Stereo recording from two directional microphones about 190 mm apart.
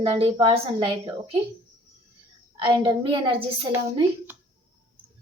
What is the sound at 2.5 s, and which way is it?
Speech, 25° right (ahead or behind).